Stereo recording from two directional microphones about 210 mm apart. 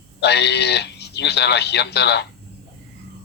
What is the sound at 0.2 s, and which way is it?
Speech, 55° left (ahead or behind).